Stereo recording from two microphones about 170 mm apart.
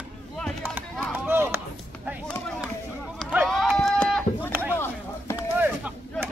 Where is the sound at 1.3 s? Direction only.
15° right (ahead or behind).